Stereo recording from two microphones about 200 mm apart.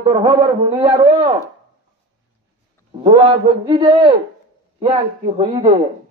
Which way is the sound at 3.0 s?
25° right (ahead or behind).